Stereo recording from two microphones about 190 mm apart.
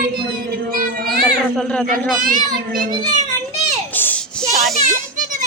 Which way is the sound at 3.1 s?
40° right (ahead or behind).